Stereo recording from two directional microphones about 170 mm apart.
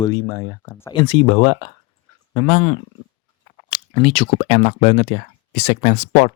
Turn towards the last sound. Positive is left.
turn(degrees=40)  # may be behind; listen again after turning